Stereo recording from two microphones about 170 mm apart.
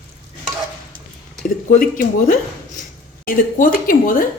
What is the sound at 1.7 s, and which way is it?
Cutlery, 50° left (ahead or behind).